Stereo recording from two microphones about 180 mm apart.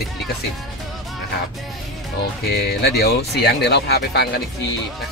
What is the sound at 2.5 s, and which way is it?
Speech, 65° left (ahead or behind).